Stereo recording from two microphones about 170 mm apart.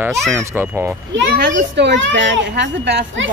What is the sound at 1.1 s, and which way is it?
A child's voice, 85° right.